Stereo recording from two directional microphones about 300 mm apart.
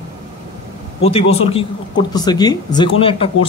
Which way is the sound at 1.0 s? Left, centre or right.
Centre.